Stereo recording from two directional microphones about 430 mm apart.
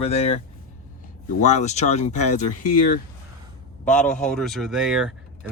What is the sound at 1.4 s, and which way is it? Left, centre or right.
Speech, centre.